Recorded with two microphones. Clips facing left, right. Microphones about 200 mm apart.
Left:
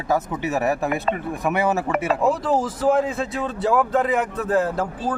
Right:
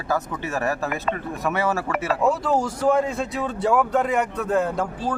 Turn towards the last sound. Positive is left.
turn(degrees=5)  # may be behind; listen again after turning